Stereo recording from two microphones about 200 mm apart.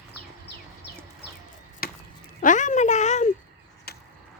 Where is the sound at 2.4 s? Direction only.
40° left (ahead or behind).